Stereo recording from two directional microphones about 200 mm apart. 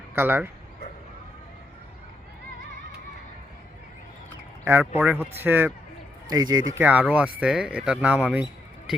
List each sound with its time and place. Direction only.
0.2 s speech: 10° right (ahead or behind)
4.6 s speech: 10° right (ahead or behind)
6.7 s speech: 10° right (ahead or behind)